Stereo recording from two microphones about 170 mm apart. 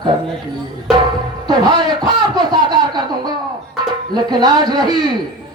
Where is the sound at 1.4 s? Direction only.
25° right (ahead or behind).